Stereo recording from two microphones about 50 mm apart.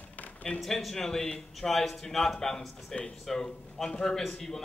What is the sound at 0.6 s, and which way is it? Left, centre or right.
A man's voice, centre.